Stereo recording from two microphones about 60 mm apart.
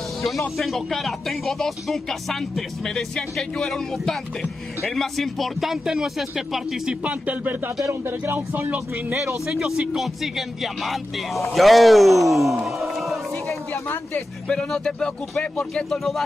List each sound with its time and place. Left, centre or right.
0.2 s speech: centre
7.0 s speech: right
7.8 s speech: right
9.5 s speech: centre
12.6 s a sound: centre
14.5 s speech: centre